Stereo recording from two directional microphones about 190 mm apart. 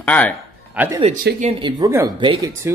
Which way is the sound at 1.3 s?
60° right (ahead or behind).